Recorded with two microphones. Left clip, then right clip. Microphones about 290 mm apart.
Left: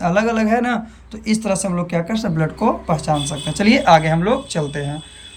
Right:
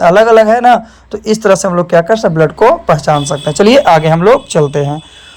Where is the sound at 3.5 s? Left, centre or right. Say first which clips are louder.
Right 7 dB; centre.